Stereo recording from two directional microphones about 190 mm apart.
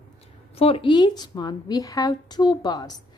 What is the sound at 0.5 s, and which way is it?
A woman's voice, 30° left (ahead or behind).